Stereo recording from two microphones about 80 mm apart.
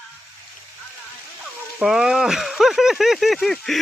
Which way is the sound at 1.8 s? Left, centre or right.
Centre.